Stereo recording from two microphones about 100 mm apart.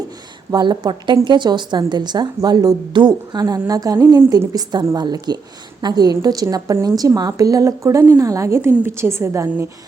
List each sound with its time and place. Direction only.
0.5 s a woman's voice: 45° right (ahead or behind); by 9.6 s 25° right (ahead or behind)